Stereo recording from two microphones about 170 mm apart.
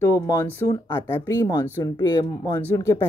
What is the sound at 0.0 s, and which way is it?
Speech, 15° left (ahead or behind).